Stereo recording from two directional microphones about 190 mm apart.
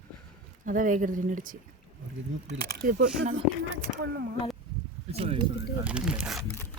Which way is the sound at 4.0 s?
60° right (ahead or behind).